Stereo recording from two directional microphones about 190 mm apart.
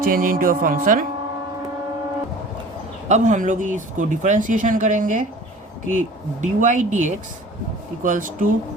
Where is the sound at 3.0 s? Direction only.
40° right (ahead or behind).